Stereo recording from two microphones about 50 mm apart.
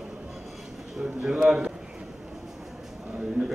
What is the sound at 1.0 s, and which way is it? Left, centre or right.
Speech, centre.